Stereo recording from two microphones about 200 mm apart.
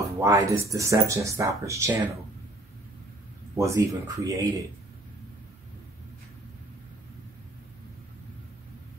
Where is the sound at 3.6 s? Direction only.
15° right (ahead or behind).